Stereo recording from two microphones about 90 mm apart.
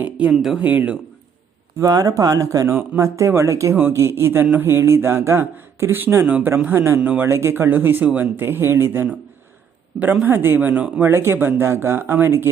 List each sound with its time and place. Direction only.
0.0 s speech: 15° right (ahead or behind)
0.3 s speech: 5° right (ahead or behind)
0.6 s speech: 20° right (ahead or behind)
1.8 s speech: 40° right (ahead or behind); by 9.0 s 25° right (ahead or behind)
10.2 s speech: 25° right (ahead or behind)